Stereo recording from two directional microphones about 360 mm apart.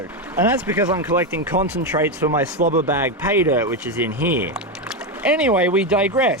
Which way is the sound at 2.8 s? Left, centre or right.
Centre.